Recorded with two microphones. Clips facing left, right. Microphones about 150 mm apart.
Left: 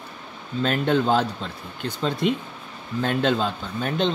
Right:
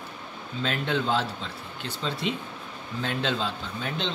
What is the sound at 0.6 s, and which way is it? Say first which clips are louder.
Speech: left 6 dB; 45° left (ahead or behind).